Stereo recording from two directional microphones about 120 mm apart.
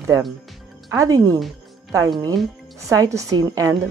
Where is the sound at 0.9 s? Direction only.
30° right (ahead or behind).